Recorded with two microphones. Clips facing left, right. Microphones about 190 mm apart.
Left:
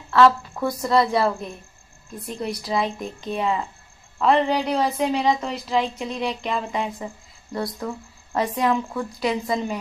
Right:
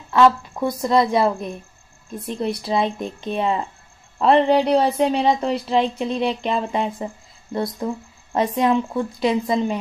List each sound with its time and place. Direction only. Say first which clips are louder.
0.1 s a woman's voice: right 1 dB; 15° right (ahead or behind)